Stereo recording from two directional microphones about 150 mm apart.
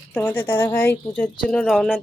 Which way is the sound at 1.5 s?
5° left (ahead or behind).